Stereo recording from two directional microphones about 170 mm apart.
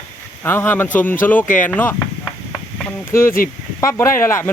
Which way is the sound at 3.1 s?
15° left (ahead or behind).